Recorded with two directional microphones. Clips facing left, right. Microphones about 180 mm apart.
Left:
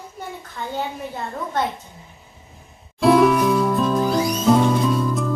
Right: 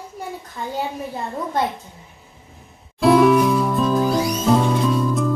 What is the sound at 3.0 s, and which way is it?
Music, centre (ahead or behind).